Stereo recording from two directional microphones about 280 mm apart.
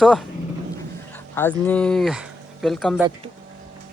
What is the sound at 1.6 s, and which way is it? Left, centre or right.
Speech, centre.